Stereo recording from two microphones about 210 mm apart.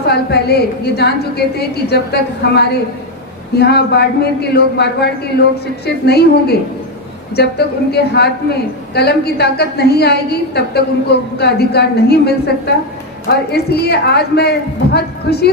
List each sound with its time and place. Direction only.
0.1 s a woman's voice: 50° left (ahead or behind)